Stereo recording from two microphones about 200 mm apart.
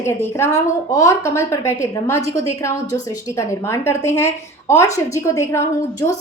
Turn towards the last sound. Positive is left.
turn(degrees=15)  # may be behind; listen again after turning